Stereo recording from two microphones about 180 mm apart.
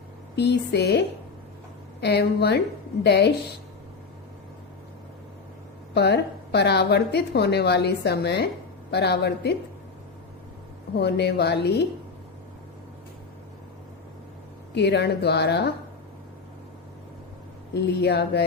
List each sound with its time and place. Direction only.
0.3 s a woman's voice: 70° left (ahead or behind)
5.9 s a woman's voice: 70° left (ahead or behind)
10.9 s a woman's voice: 65° left (ahead or behind)
14.8 s a woman's voice: 70° left (ahead or behind)
17.7 s a woman's voice: 70° left (ahead or behind)